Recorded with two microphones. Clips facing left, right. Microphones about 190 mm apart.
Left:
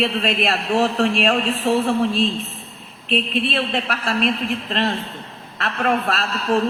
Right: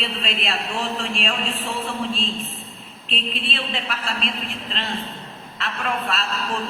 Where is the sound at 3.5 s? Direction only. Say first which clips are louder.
Left 6 dB; 50° left (ahead or behind).